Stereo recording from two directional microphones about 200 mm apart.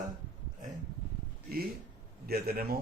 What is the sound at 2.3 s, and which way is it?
Speech, 50° right (ahead or behind).